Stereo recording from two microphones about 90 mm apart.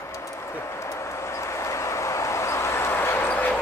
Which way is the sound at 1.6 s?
35° left (ahead or behind).